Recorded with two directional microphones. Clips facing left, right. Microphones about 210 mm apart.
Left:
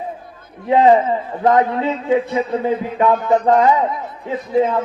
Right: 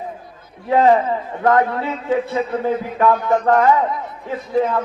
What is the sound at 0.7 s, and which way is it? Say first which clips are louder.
A man's voice: left 2 dB; 20° left (ahead or behind).